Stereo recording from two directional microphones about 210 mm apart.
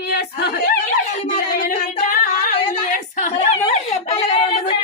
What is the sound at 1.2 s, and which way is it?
Singing, 40° left (ahead or behind).